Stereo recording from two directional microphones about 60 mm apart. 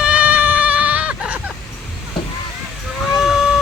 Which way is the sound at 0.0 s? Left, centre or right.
Right.